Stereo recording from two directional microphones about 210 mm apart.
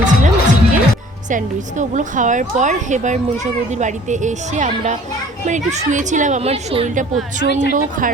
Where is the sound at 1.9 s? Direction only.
35° right (ahead or behind).